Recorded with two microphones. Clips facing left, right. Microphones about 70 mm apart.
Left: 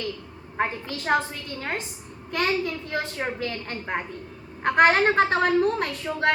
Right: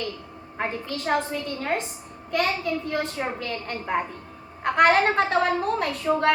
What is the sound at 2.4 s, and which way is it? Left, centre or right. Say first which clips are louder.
Speech: left 1 dB; left.